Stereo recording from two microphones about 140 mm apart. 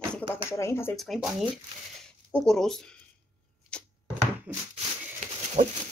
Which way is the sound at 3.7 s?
5° left (ahead or behind).